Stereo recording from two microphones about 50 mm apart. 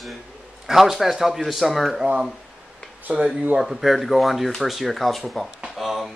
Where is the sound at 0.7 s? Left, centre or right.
Centre.